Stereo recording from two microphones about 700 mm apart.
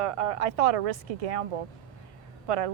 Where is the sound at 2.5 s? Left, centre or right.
Right.